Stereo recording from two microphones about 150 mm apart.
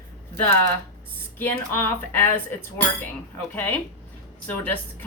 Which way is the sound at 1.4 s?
15° left (ahead or behind).